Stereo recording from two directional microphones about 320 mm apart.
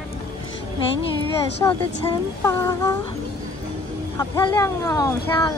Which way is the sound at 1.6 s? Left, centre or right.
Centre.